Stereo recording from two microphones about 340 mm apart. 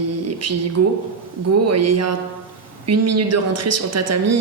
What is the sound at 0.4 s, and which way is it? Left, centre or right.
Speech, right.